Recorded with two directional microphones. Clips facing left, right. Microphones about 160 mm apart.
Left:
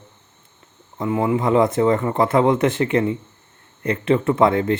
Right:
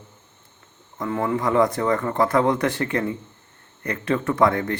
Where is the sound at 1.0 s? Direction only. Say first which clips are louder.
Left 4 dB; 20° left (ahead or behind).